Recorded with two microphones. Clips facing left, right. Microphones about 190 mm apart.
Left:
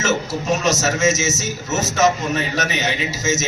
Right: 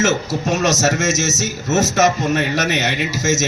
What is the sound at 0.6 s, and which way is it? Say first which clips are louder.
A man's voice: right 1 dB; 75° right (ahead or behind).